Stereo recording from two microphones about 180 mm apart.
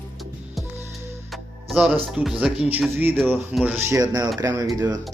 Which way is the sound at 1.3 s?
5° right (ahead or behind).